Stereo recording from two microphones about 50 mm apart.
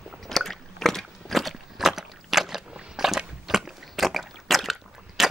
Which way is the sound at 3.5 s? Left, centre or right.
Centre.